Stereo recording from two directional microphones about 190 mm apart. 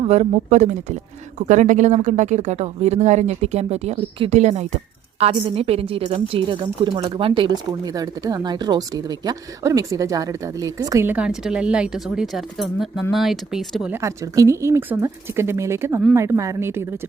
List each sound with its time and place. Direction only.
0.0 s a woman's voice: 35° right (ahead or behind); by 13.9 s centre (ahead or behind)
13.9 s speech: 15° right (ahead or behind)